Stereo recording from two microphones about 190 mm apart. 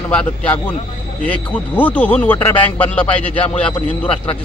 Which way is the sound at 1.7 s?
10° left (ahead or behind).